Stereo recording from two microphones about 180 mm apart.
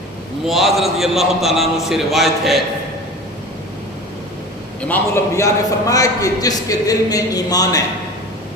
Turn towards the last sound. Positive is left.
turn(degrees=20)  # may be behind; listen again after turning